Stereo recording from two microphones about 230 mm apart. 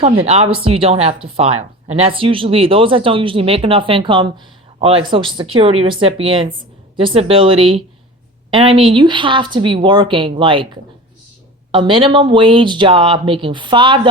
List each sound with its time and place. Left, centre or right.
0.0 s speech: right
11.7 s speech: right